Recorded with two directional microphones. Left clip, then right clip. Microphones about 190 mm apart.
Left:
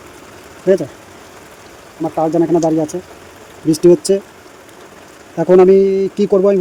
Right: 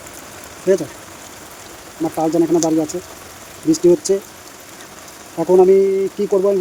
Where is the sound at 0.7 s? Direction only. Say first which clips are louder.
Left 3 dB; 35° left (ahead or behind).